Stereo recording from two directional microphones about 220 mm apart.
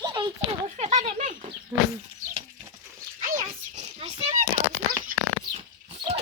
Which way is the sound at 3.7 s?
30° right (ahead or behind).